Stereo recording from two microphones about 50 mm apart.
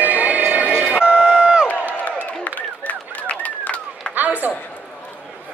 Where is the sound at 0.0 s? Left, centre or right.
Right.